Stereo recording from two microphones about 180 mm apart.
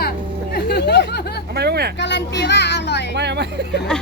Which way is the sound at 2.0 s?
75° left (ahead or behind).